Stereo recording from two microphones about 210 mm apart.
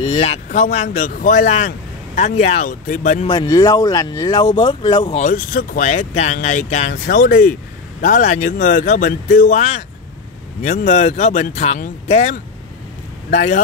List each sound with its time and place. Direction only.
0.0 s speech: 30° left (ahead or behind)
3.3 s speech: 20° left (ahead or behind)
5.2 s speech: 40° left (ahead or behind)